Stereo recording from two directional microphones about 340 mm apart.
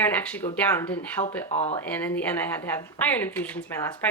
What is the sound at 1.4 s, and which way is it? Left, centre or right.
Speech, centre.